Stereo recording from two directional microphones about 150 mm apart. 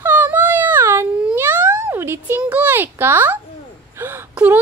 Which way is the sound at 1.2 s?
15° right (ahead or behind).